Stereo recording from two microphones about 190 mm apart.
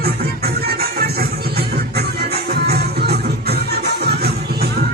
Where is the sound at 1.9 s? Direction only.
55° right (ahead or behind).